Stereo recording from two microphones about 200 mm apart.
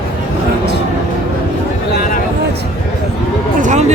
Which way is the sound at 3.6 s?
35° right (ahead or behind).